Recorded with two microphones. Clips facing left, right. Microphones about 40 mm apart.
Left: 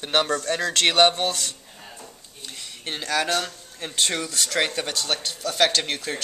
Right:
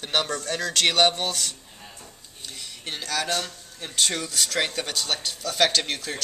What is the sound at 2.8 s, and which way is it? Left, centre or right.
Speech, centre.